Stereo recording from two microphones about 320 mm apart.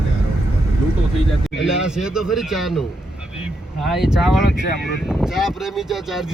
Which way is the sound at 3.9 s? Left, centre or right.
Centre.